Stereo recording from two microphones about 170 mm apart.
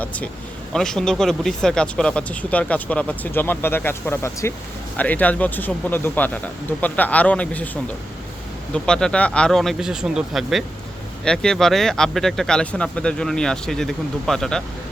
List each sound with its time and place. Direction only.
0.7 s speech: 5° left (ahead or behind)